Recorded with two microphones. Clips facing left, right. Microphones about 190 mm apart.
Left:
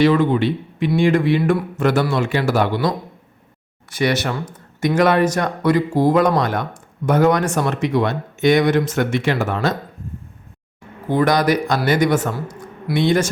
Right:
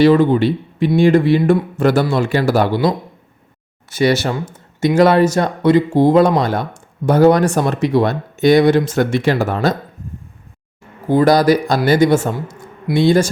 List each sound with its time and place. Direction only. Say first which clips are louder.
0.0 s speech: right 4 dB; 35° right (ahead or behind)
11.1 s speech: right 5 dB; 30° right (ahead or behind)